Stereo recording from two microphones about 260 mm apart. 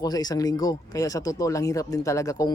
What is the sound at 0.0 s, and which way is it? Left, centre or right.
Speech, centre.